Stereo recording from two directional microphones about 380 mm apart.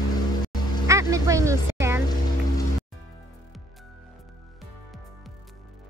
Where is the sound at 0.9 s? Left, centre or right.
Centre.